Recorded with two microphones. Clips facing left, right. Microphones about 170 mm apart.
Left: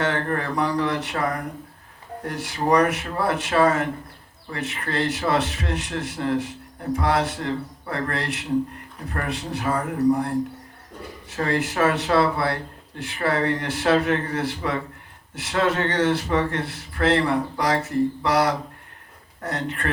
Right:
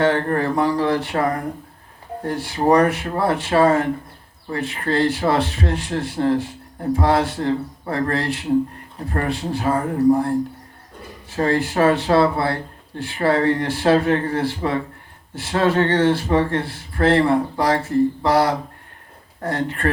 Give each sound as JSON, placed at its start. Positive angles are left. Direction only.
{"t": 0.0, "sound": "a man's voice", "side_deg": -35}
{"t": 2.2, "sound": "a man's voice", "side_deg": -30}